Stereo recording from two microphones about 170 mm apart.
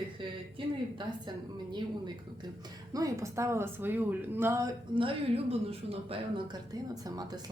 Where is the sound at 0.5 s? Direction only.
30° right (ahead or behind).